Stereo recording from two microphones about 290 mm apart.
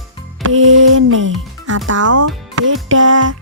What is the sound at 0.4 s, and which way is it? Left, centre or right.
Music, right.